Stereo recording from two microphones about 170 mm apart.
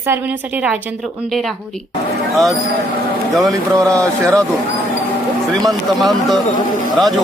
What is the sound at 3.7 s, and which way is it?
Speech, 20° right (ahead or behind).